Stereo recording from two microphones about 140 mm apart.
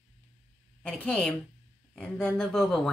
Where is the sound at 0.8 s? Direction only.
10° left (ahead or behind).